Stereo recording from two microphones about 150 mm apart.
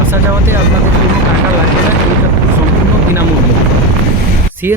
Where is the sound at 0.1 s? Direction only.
15° right (ahead or behind).